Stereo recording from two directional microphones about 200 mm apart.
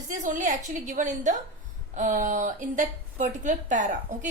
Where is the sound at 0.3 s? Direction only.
40° right (ahead or behind).